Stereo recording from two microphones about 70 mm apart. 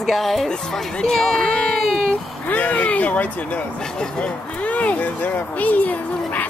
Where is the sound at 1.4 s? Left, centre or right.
Centre.